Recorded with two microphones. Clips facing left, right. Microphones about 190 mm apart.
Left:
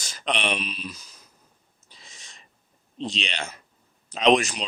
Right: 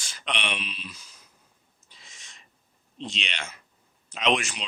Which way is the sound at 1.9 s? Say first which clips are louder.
Left 3 dB; 35° left (ahead or behind).